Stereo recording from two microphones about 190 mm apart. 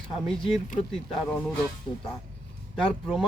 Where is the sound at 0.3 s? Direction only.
Centre (ahead or behind).